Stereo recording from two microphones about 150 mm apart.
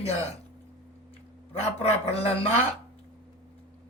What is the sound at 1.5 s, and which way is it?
Speech, 40° left (ahead or behind).